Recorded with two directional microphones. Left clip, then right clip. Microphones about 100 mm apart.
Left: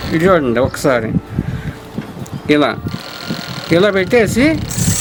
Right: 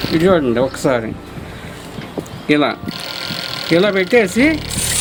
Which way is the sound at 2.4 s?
35° left (ahead or behind).